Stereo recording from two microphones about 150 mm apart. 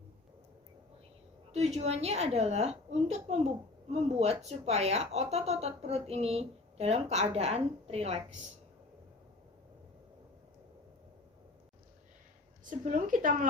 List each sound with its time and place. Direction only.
1.5 s a woman's voice: 45° right (ahead or behind)
12.8 s speech: 60° right (ahead or behind)